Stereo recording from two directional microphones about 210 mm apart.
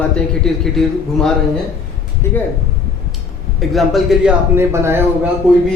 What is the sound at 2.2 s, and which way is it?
Speech, 10° left (ahead or behind).